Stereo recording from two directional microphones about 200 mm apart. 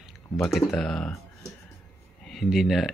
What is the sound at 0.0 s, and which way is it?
Speech, centre (ahead or behind).